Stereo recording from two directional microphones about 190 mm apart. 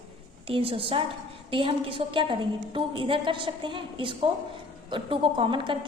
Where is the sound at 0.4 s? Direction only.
30° right (ahead or behind).